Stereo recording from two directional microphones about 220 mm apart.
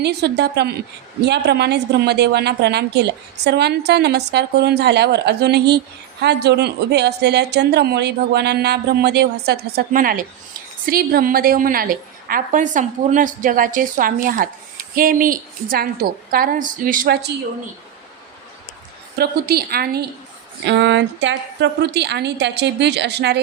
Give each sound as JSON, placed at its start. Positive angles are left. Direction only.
{"t": 0.0, "sound": "a woman's voice", "side_deg": -50}
{"t": 19.1, "sound": "a woman's voice", "side_deg": -45}